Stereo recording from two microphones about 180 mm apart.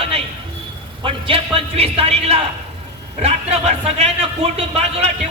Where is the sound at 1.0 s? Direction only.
30° right (ahead or behind).